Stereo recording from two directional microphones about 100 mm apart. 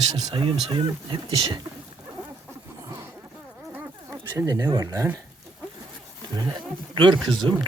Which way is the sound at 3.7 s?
25° right (ahead or behind).